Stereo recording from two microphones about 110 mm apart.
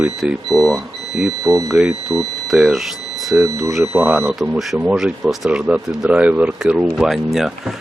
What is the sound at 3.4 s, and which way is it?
Speech, 25° right (ahead or behind).